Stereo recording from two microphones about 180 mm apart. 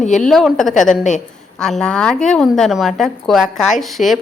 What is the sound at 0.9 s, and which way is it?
Speech, 45° left (ahead or behind).